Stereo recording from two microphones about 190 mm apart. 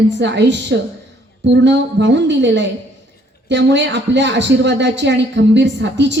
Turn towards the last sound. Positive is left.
turn(degrees=-65)  # may be behind; listen again after turning